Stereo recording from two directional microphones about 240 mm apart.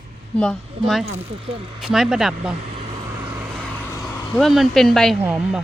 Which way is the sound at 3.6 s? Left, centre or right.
Centre.